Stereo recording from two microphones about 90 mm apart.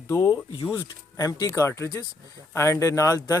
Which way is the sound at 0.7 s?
40° left (ahead or behind).